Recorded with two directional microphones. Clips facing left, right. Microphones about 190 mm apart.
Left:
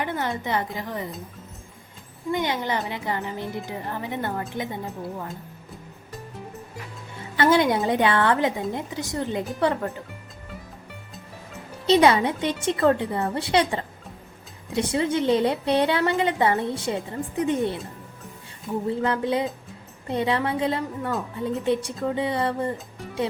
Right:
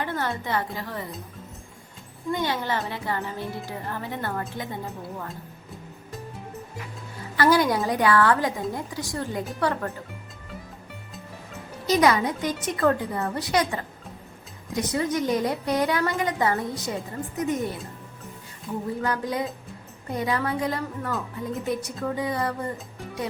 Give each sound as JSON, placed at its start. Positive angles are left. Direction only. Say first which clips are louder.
{"t": 0.0, "sound": "a woman's voice", "louder": "left 1 dB", "side_deg": 15}
{"t": 2.3, "sound": "a woman's voice", "louder": "left 1 dB", "side_deg": 20}
{"t": 7.3, "sound": "a woman's voice", "louder": "left 1 dB", "side_deg": 25}
{"t": 11.9, "sound": "a woman's voice", "louder": "left 3 dB", "side_deg": 30}